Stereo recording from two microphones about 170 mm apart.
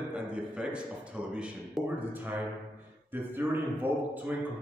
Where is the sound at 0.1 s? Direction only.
5° right (ahead or behind).